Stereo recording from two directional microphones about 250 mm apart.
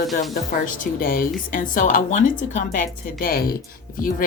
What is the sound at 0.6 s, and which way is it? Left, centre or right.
Speech, left.